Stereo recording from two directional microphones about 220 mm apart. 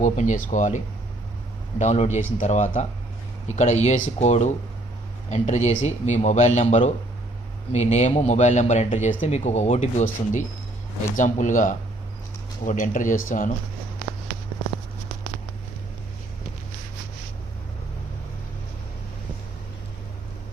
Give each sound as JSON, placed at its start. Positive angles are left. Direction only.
{"t": 0.0, "sound": "speech", "side_deg": 35}
{"t": 1.8, "sound": "speech", "side_deg": 30}